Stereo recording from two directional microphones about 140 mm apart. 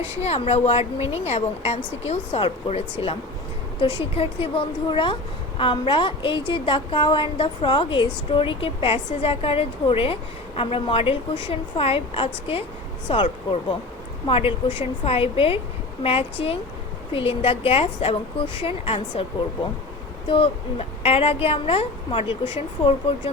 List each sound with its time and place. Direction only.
0.2 s a woman's voice: 45° left (ahead or behind)
14.3 s a woman's voice: 40° left (ahead or behind)
20.2 s a woman's voice: 40° left (ahead or behind)